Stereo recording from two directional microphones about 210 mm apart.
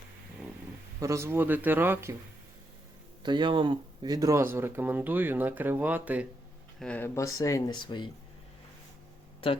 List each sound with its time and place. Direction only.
0.9 s speech: 15° right (ahead or behind)
3.2 s speech: 20° right (ahead or behind)
6.7 s speech: 5° left (ahead or behind); by 8.1 s 20° left (ahead or behind)